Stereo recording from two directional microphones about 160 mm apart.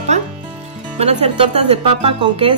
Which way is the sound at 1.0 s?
40° right (ahead or behind).